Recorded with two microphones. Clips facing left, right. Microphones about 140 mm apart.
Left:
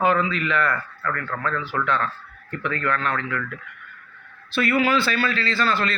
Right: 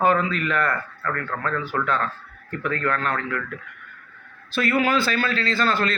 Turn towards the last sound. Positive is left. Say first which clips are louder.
# right 1 dB
turn(degrees=-50)  # may be behind; listen again after turning